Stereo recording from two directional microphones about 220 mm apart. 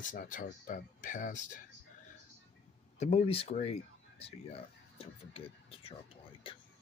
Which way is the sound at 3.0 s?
30° left (ahead or behind).